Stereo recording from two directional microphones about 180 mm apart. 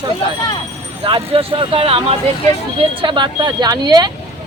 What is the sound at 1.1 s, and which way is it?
Speech, 30° right (ahead or behind).